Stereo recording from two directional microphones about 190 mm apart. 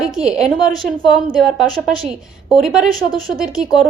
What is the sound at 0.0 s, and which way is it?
A woman's voice, 5° right (ahead or behind).